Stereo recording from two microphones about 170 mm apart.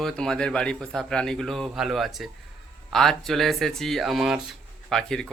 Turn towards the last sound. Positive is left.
turn(degrees=5)  # may be behind; listen again after turning